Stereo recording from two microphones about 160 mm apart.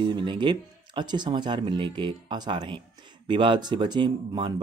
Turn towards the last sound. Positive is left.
turn(degrees=-30)  # may be behind; listen again after turning